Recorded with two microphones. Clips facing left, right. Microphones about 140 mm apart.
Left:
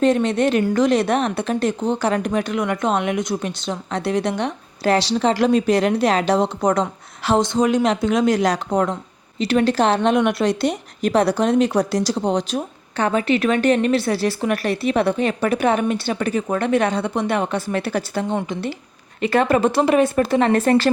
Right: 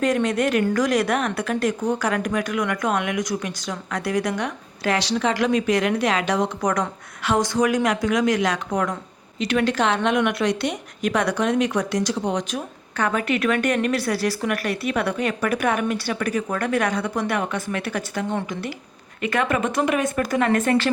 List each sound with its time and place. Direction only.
0.0 s a woman's voice: 25° left (ahead or behind)